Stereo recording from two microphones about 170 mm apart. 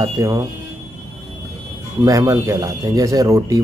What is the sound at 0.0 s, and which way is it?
Speech, 20° right (ahead or behind).